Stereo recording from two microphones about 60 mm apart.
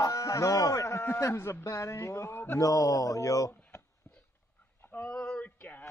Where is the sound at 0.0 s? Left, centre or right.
Left.